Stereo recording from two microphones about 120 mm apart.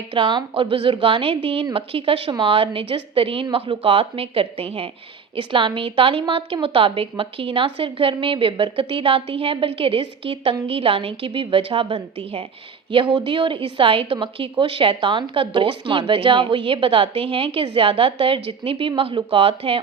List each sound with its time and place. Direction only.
0.1 s a woman's voice: 45° right (ahead or behind)